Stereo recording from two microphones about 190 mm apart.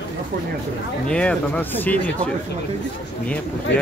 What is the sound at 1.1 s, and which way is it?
Speech, 5° left (ahead or behind).